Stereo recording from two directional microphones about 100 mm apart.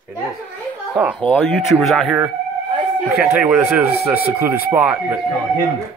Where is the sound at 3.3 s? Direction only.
20° right (ahead or behind).